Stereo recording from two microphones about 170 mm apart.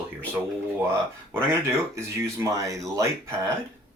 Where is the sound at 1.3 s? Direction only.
15° right (ahead or behind).